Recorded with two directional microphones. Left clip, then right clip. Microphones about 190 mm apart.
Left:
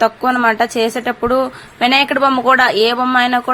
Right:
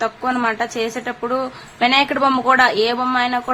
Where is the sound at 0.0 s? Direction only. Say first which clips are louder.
Left 6 dB; 25° left (ahead or behind).